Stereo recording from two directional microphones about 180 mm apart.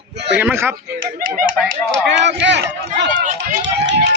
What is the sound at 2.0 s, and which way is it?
Run, 75° right (ahead or behind).